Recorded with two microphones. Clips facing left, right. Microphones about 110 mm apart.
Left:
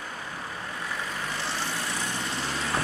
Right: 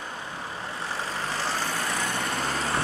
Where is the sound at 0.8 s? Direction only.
30° right (ahead or behind); by 2.7 s 45° right (ahead or behind).